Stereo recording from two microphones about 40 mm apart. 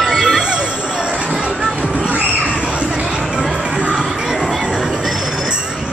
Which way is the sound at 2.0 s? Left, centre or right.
Right.